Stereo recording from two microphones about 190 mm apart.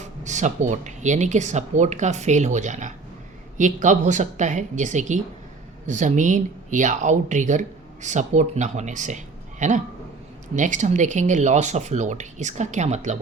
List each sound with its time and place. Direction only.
0.0 s speech: 40° right (ahead or behind)